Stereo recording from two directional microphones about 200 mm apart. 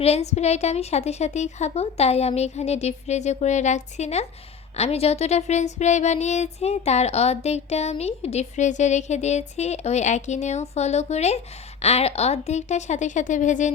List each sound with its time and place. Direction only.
0.0 s speech: 30° left (ahead or behind)